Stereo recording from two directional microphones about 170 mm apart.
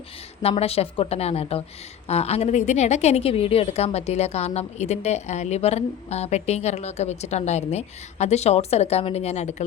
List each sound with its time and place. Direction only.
0.4 s a woman's voice: 35° left (ahead or behind)